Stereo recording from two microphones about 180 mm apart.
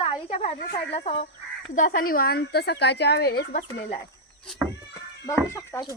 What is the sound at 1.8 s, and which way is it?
A woman's voice, 50° left (ahead or behind).